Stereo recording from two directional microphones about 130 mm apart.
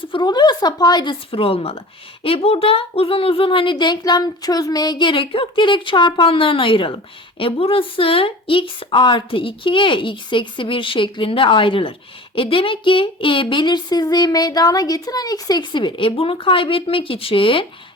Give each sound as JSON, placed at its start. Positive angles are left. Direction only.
{"t": 0.1, "sound": "speech", "side_deg": 35}
{"t": 1.3, "sound": "speech", "side_deg": 45}